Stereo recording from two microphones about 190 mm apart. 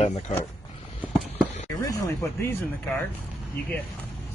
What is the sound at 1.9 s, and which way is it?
Speech, 20° left (ahead or behind).